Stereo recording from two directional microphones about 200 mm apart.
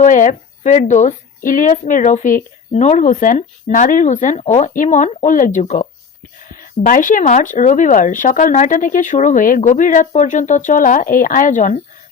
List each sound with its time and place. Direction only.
0.0 s speech: 40° left (ahead or behind)